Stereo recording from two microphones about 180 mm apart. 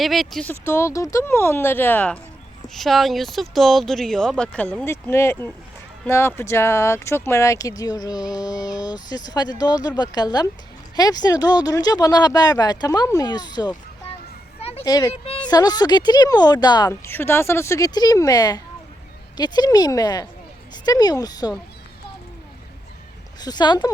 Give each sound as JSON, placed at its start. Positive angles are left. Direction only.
{"t": 0.0, "sound": "speech", "side_deg": 0}
{"t": 0.6, "sound": "speech", "side_deg": 15}
{"t": 14.6, "sound": "a sound", "side_deg": 35}
{"t": 14.8, "sound": "speech", "side_deg": 20}
{"t": 23.4, "sound": "speech", "side_deg": 25}